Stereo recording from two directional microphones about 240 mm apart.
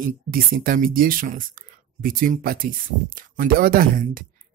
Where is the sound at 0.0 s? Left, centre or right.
Right.